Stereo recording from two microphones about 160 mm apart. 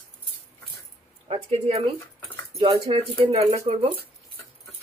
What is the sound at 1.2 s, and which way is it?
Speech, 40° right (ahead or behind).